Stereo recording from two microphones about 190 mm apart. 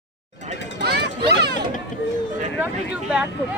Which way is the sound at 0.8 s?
60° right (ahead or behind).